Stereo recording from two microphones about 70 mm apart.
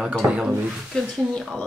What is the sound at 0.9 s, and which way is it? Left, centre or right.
Speech, centre.